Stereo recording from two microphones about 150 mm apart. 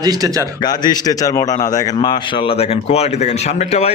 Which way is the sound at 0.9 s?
25° left (ahead or behind).